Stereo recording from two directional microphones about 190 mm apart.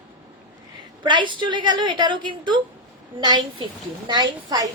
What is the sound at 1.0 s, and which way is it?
A woman's voice, 25° right (ahead or behind).